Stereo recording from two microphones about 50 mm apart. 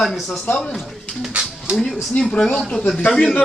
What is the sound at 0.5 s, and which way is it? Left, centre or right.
Speech, centre.